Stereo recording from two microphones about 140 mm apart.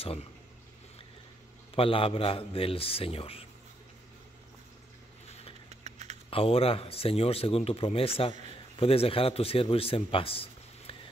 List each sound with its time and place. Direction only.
0.0 s speech: 45° left (ahead or behind)
1.8 s a man's voice: 40° left (ahead or behind)
5.7 s a sound: 55° right (ahead or behind)
6.3 s a man's voice: 40° left (ahead or behind)